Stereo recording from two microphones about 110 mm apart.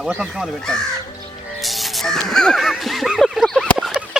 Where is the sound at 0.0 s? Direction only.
5° right (ahead or behind).